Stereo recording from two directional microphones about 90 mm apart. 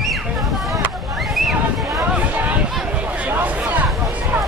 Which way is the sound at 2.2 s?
15° right (ahead or behind).